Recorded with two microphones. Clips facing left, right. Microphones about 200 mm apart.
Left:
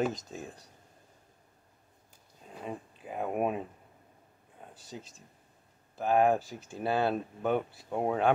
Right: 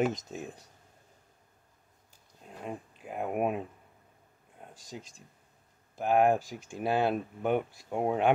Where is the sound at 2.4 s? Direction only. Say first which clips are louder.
Even; centre (ahead or behind).